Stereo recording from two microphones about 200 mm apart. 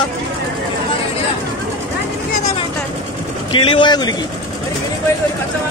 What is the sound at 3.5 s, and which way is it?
Speech, 25° left (ahead or behind).